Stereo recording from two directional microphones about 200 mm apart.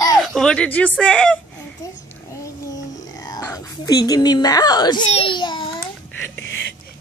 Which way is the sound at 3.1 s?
15° left (ahead or behind).